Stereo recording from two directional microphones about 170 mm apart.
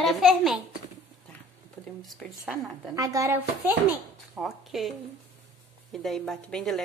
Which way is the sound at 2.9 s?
20° right (ahead or behind).